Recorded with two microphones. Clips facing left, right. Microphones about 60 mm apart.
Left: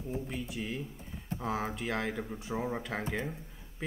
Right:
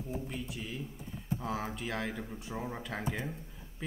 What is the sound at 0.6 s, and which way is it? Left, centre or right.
Speech, left.